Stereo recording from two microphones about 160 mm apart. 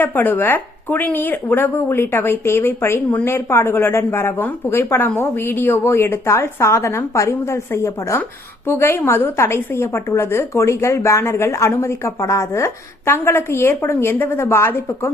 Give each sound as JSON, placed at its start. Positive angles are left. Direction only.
{"t": 0.0, "sound": "a woman's voice", "side_deg": 10}